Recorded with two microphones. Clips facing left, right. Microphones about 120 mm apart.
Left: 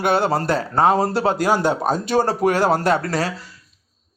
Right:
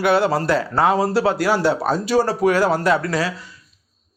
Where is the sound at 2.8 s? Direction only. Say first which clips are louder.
Right 1 dB; 30° left (ahead or behind).